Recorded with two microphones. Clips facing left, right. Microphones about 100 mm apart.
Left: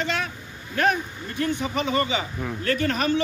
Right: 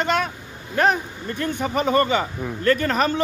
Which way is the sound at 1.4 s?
50° right (ahead or behind).